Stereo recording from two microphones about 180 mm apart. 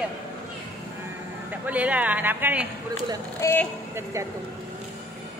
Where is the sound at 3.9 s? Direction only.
15° right (ahead or behind).